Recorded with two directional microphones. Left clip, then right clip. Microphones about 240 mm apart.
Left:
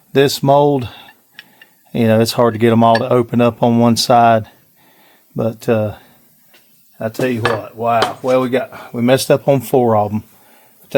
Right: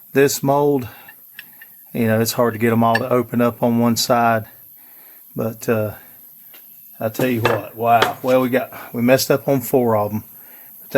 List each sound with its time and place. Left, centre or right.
0.1 s speech: left
7.0 s dishes: left
7.8 s speech: left